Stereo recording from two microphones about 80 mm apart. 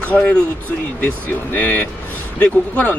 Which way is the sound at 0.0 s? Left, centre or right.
Centre.